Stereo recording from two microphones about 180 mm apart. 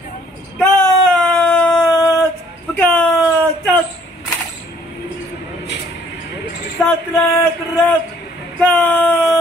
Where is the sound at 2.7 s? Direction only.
10° left (ahead or behind).